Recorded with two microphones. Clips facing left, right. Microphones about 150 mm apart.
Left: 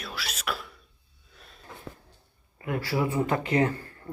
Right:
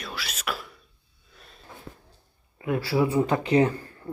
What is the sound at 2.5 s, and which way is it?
Speech, 20° right (ahead or behind).